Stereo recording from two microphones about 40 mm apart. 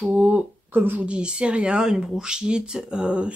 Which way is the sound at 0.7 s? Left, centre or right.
Right.